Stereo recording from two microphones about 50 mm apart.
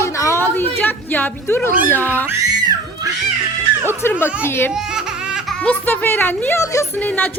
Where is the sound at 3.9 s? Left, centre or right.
Left.